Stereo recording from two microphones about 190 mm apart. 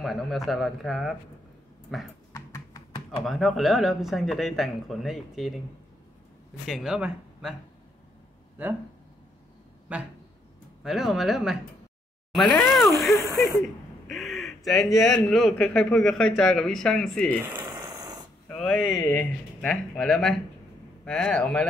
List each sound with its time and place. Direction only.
0.0 s speech: centre (ahead or behind)
2.3 s computer keyboard: 15° left (ahead or behind)
3.3 s speech: centre (ahead or behind)
6.6 s speech: centre (ahead or behind)
8.6 s speech: 10° right (ahead or behind)
9.9 s speech: 5° right (ahead or behind)
13.6 s a sound: centre (ahead or behind)
15.7 s speech: 5° left (ahead or behind)
17.6 s a sound: 20° right (ahead or behind)
18.5 s speech: 5° left (ahead or behind)